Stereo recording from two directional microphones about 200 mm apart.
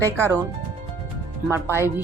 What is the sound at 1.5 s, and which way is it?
Speech, 10° right (ahead or behind).